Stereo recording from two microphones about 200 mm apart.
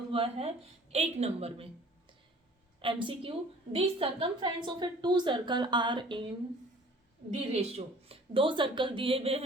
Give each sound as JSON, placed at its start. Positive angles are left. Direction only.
{"t": 0.1, "sound": "a woman's voice", "side_deg": -30}
{"t": 2.8, "sound": "a woman's voice", "side_deg": -25}
{"t": 7.3, "sound": "a woman's voice", "side_deg": -30}